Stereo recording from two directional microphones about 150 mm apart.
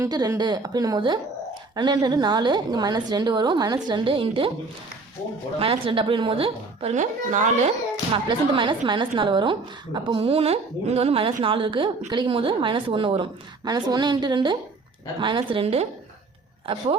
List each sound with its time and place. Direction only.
0.0 s a woman's voice: 25° right (ahead or behind)
5.5 s a woman's voice: 35° right (ahead or behind)
6.9 s speech: 55° right (ahead or behind)
8.1 s a woman's voice: 35° right (ahead or behind)